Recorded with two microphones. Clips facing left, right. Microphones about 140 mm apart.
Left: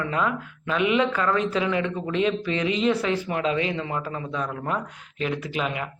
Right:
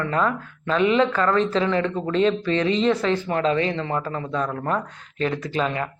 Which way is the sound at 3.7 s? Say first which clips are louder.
Right 3 dB; 15° left (ahead or behind).